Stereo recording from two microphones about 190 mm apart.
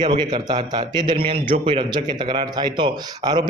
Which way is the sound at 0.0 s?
25° right (ahead or behind).